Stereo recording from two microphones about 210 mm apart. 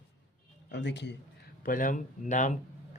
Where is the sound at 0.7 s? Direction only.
55° left (ahead or behind).